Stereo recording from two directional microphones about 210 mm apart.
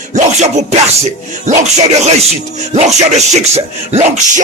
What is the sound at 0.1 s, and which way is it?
Music, 35° right (ahead or behind).